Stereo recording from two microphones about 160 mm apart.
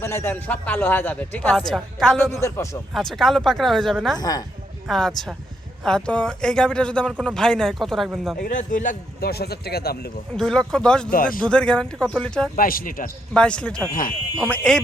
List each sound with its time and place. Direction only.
0.0 s speech: 15° left (ahead or behind); by 4.2 s centre (ahead or behind)
4.2 s a woman's voice: 25° left (ahead or behind)
4.9 s speech: centre (ahead or behind)
8.4 s a man's voice: 60° left (ahead or behind)
9.3 s speech: 80° left
10.3 s speech: 5° left (ahead or behind)
11.1 s a man's voice: 60° left (ahead or behind)
11.4 s speech: 5° left (ahead or behind)
12.5 s a man's voice: 65° left (ahead or behind)
13.3 s speech: 5° left (ahead or behind)